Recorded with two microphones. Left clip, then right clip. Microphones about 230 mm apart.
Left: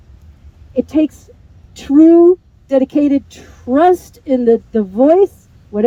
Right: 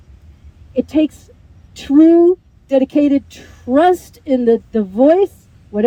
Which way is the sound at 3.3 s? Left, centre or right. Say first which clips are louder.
Even; centre.